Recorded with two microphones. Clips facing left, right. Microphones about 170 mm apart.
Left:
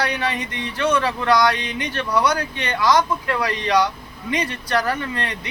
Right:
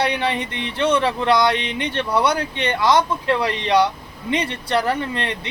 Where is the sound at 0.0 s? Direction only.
25° right (ahead or behind).